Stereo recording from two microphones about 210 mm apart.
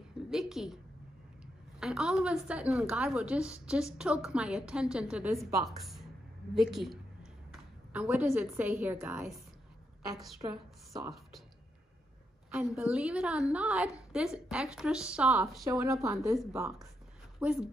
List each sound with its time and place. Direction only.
0.3 s a sound: centre (ahead or behind)
1.8 s a woman's voice: centre (ahead or behind)
10.4 s a woman's voice: 20° right (ahead or behind)
12.4 s a woman's voice: 10° right (ahead or behind)
15.6 s a woman's voice: 15° right (ahead or behind)
17.4 s speech: 5° right (ahead or behind)